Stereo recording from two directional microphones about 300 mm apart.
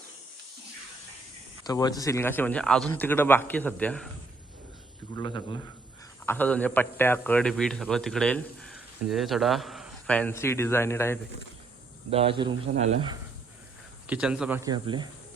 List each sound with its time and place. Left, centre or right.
1.6 s a man's voice: centre
5.1 s a man's voice: centre
6.2 s a man's voice: centre
12.1 s speech: centre
14.1 s a man's voice: centre